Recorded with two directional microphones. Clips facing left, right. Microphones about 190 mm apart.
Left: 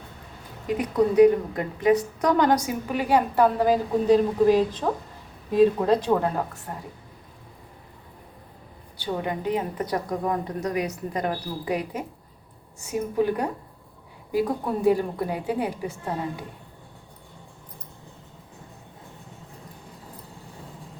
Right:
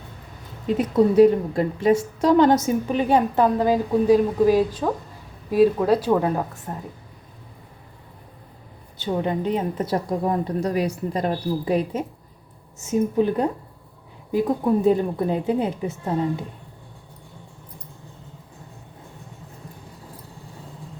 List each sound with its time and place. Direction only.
0.7 s a woman's voice: 30° right (ahead or behind); by 6.6 s 10° right (ahead or behind)
9.0 s a woman's voice: 30° right (ahead or behind)